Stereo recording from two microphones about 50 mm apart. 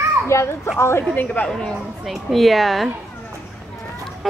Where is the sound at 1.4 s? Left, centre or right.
Centre.